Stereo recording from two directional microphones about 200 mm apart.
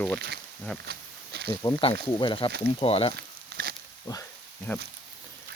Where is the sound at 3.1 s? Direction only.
50° right (ahead or behind).